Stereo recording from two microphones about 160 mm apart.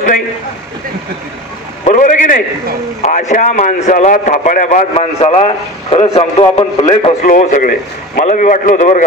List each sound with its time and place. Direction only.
1.9 s a sound: 50° left (ahead or behind)
3.0 s a man's voice: 50° left (ahead or behind)
4.9 s a man's voice: 40° left (ahead or behind)
7.2 s a man's voice: 50° left (ahead or behind)